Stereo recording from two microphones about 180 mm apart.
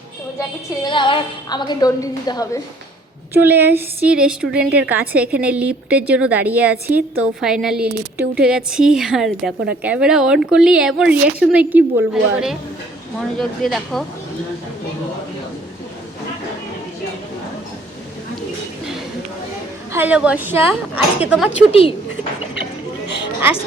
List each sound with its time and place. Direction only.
0.9 s a woman's voice: 25° left (ahead or behind)
3.3 s a woman's voice: 10° right (ahead or behind)
19.9 s a woman's voice: 10° right (ahead or behind)
21.7 s a woman's voice: 30° left (ahead or behind)
23.0 s a sound: 75° left (ahead or behind)